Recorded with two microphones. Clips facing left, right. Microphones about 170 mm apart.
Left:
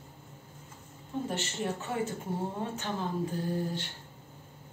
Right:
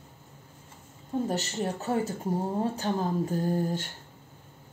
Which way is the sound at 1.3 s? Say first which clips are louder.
Right 3 dB; 40° right (ahead or behind).